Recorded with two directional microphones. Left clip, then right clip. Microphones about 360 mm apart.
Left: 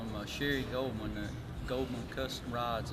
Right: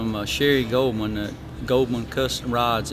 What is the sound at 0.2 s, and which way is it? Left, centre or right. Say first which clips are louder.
Speech: right 15 dB; right.